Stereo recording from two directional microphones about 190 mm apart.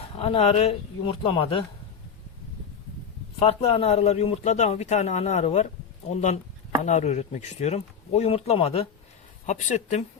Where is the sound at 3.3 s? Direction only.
30° left (ahead or behind).